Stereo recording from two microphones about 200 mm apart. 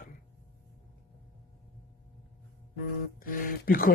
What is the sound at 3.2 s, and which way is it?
Speech, 45° left (ahead or behind).